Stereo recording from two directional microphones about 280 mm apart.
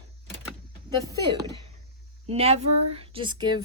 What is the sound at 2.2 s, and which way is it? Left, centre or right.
A woman's voice, right.